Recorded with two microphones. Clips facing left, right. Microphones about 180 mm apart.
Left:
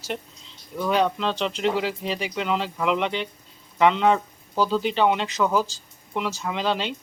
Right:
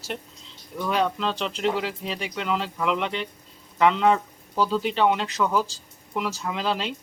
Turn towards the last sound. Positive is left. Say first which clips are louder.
# left 2 dB
turn(degrees=0)  # may be behind; listen again after turning